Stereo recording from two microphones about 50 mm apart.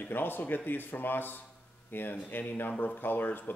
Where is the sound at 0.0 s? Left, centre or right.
Left.